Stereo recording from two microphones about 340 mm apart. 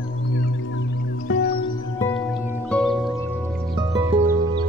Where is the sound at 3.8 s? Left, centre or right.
Centre.